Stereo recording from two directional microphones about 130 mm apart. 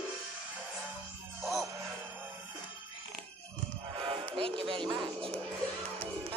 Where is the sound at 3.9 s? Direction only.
45° right (ahead or behind).